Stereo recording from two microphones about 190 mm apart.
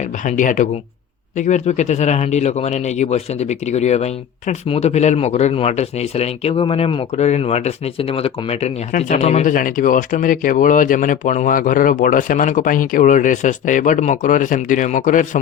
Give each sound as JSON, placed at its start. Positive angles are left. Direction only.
{"t": 0.3, "sound": "speech", "side_deg": 40}